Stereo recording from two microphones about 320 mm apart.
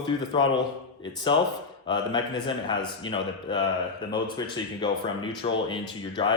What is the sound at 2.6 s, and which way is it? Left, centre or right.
Speech, centre.